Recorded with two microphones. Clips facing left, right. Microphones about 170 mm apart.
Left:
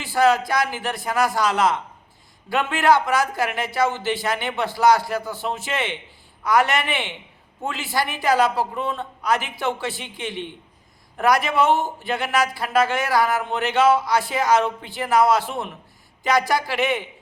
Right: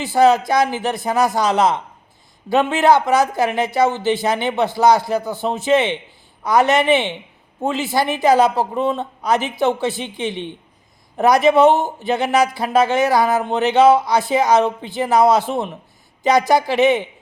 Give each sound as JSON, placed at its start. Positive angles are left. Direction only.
{"t": 0.0, "sound": "speech", "side_deg": -20}